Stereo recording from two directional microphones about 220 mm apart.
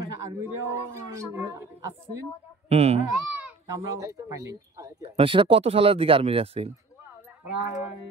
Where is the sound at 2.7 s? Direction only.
30° right (ahead or behind).